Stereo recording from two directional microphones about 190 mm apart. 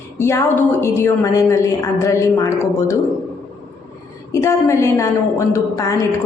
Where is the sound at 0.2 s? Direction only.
15° left (ahead or behind).